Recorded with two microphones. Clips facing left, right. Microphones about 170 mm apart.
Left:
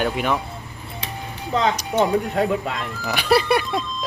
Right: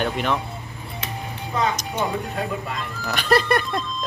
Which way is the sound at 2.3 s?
70° left (ahead or behind).